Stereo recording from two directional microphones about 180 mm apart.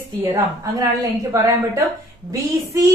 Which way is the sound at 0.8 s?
15° right (ahead or behind).